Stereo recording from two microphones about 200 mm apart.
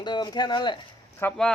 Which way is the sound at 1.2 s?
5° left (ahead or behind).